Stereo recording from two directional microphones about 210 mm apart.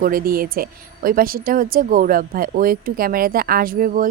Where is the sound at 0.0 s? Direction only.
45° right (ahead or behind).